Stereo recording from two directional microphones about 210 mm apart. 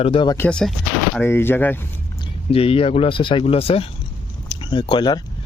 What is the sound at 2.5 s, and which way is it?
Speech, 25° left (ahead or behind).